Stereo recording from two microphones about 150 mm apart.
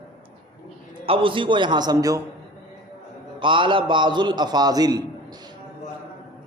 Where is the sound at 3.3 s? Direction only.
35° right (ahead or behind).